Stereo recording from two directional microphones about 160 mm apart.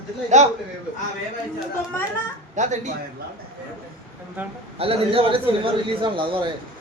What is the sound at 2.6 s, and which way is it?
Speech, 50° right (ahead or behind).